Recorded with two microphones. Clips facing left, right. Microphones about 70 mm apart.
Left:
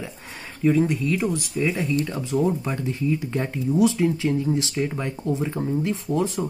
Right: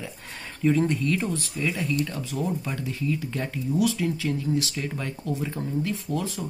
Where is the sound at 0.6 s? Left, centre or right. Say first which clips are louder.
Left 2 dB; centre.